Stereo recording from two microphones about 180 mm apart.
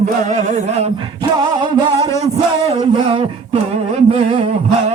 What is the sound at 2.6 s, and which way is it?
Music, 35° right (ahead or behind).